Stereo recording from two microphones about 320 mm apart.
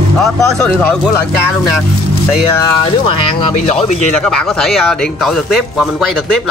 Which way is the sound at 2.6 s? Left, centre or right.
Centre.